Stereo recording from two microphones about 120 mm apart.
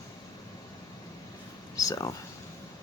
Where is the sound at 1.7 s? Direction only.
30° left (ahead or behind).